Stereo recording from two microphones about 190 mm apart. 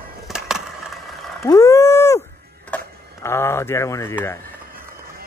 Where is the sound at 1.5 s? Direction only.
15° left (ahead or behind).